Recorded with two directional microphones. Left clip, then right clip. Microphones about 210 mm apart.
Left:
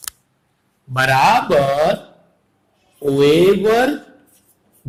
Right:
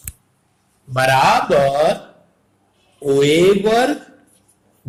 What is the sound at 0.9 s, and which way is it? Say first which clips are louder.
A man's voice: even; 35° left (ahead or behind).